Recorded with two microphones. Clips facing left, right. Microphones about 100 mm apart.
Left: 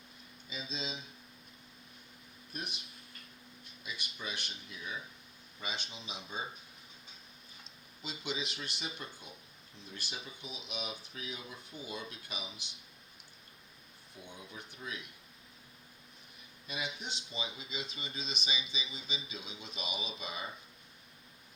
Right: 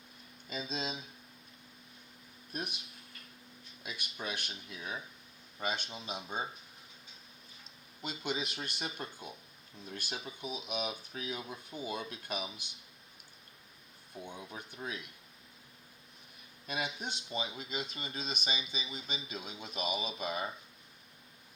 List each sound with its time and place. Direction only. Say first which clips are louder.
0.5 s speech: right 4 dB; 50° right (ahead or behind)
2.5 s speech: right 3 dB; 50° right (ahead or behind)
3.8 s speech: right 2 dB; 50° right (ahead or behind)
8.0 s speech: right 3 dB; 50° right (ahead or behind)
14.3 s speech: right 2 dB; 55° right (ahead or behind)
16.6 s speech: right 3 dB; 50° right (ahead or behind)